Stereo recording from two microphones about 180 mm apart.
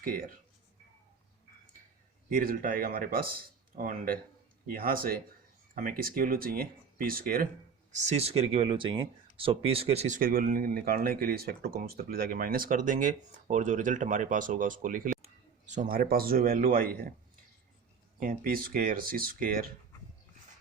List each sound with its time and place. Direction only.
0.0 s speech: 50° right (ahead or behind)
2.3 s speech: 50° right (ahead or behind)
7.9 s speech: 40° right (ahead or behind)
10.2 s speech: 50° right (ahead or behind)
18.2 s speech: 55° right (ahead or behind)